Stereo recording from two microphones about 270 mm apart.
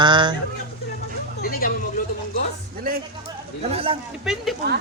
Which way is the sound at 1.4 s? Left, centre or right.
Left.